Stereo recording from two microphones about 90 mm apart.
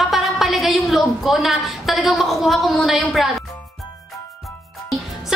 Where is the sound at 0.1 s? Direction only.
Centre (ahead or behind).